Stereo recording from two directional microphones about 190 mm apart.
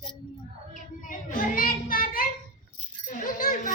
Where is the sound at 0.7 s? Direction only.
45° left (ahead or behind).